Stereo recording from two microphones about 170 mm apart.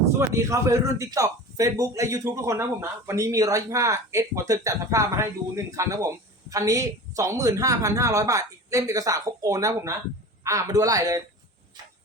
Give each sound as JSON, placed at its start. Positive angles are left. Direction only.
{"t": 0.2, "sound": "a man's voice", "side_deg": -20}